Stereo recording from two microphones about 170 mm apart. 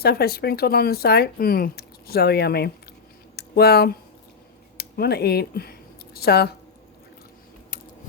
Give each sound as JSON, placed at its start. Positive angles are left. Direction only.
{"t": 0.0, "sound": "speech", "side_deg": 65}